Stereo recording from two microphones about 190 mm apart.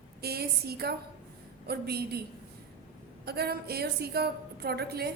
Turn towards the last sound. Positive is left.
turn(degrees=-55)  # may be behind; listen again after turning